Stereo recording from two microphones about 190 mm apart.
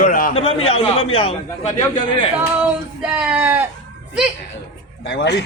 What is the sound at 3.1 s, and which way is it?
Speech, 5° right (ahead or behind).